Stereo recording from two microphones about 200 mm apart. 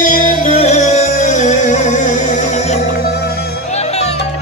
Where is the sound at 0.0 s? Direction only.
40° left (ahead or behind).